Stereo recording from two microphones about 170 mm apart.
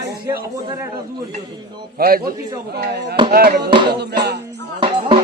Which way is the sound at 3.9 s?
75° right (ahead or behind).